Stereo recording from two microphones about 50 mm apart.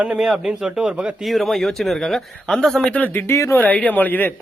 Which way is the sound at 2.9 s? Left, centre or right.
Left.